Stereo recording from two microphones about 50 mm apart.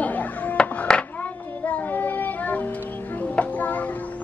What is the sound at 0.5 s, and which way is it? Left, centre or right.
Music, left.